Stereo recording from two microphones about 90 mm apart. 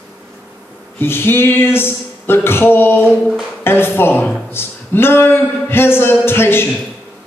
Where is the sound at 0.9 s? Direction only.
25° left (ahead or behind).